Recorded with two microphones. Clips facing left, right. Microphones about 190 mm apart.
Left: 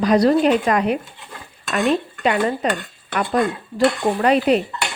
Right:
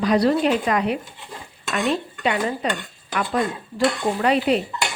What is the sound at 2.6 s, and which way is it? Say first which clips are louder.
Speech: left 3 dB; 45° left (ahead or behind).